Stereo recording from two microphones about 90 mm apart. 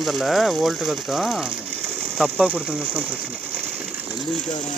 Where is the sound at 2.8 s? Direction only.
15° right (ahead or behind).